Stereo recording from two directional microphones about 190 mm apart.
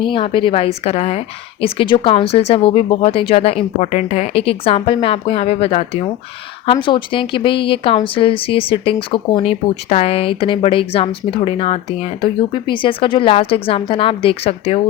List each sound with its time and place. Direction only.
0.0 s speech: 30° left (ahead or behind)